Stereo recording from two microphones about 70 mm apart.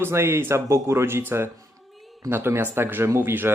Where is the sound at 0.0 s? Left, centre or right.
Right.